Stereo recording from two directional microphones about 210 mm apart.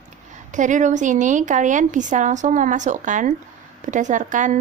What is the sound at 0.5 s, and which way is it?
A woman's voice, 35° right (ahead or behind).